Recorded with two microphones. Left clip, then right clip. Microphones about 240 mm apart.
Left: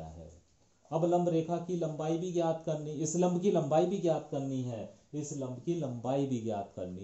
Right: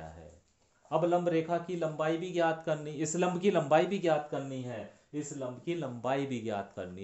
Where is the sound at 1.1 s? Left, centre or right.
Right.